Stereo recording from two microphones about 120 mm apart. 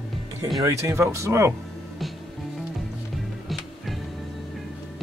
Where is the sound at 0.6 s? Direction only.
25° right (ahead or behind).